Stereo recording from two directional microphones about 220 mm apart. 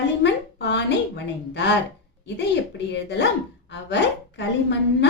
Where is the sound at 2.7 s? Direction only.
50° left (ahead or behind).